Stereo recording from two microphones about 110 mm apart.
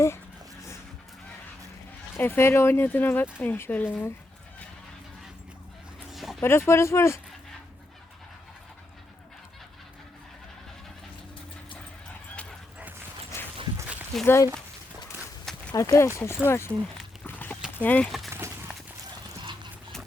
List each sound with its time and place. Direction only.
2.1 s speech: 20° left (ahead or behind)
6.1 s dog: centre (ahead or behind)
6.4 s speech: 25° left (ahead or behind)
13.3 s dog: 25° left (ahead or behind)
14.3 s speech: 25° left (ahead or behind)
15.7 s speech: 25° left (ahead or behind)
17.2 s horse: 15° left (ahead or behind)
17.7 s speech: 15° left (ahead or behind)
18.3 s a sound: 25° right (ahead or behind)